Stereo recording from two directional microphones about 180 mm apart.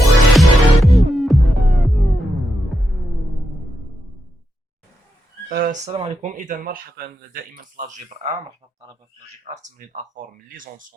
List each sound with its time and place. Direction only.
0.0 s music: centre (ahead or behind)
5.5 s speech: 50° right (ahead or behind)
6.9 s speech: 55° right (ahead or behind); by 8.4 s 40° right (ahead or behind)
9.4 s speech: 45° right (ahead or behind)